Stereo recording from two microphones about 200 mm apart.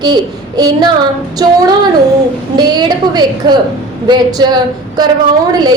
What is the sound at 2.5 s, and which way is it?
A woman's voice, 20° right (ahead or behind).